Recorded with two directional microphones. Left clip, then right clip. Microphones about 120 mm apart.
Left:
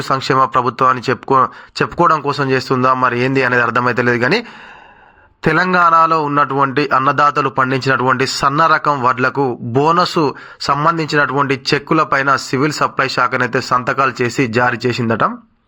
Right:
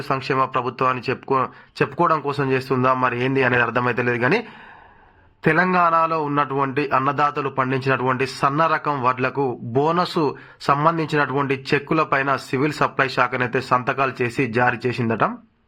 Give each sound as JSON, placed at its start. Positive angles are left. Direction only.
{"t": 0.1, "sound": "a man's voice", "side_deg": 30}